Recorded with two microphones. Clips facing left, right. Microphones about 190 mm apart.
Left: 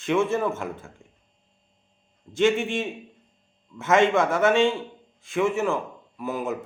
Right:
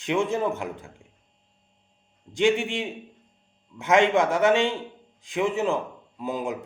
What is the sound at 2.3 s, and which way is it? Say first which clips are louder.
A man's voice: left 1 dB; 15° right (ahead or behind).